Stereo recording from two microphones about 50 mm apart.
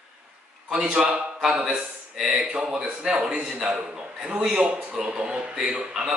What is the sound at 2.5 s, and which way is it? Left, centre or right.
Speech, centre.